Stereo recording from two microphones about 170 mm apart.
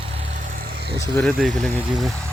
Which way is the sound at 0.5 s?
70° right (ahead or behind).